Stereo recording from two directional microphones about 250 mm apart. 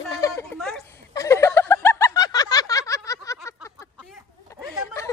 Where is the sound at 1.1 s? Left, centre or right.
Centre.